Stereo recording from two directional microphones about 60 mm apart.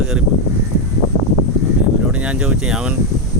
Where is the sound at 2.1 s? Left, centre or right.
Centre.